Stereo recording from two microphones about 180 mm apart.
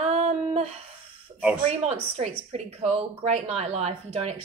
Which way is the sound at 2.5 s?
35° right (ahead or behind).